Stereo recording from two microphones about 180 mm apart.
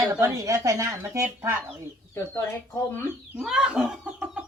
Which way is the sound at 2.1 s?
15° left (ahead or behind).